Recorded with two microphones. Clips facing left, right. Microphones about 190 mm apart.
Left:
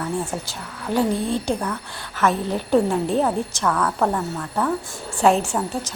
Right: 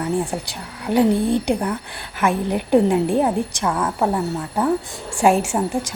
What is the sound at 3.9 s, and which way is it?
A woman's voice, 10° right (ahead or behind).